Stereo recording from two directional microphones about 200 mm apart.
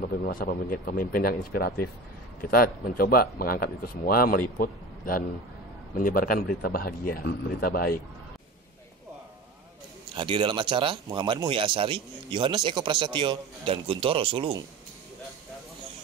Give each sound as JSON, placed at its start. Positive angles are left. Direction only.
{"t": 0.0, "sound": "speech", "side_deg": 45}
{"t": 10.1, "sound": "speech", "side_deg": -25}